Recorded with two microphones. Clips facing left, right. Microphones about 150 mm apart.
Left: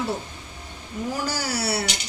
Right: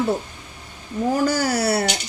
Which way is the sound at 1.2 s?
50° right (ahead or behind).